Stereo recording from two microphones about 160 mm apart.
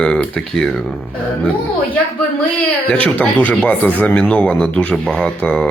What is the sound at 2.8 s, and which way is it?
Speech, 10° left (ahead or behind).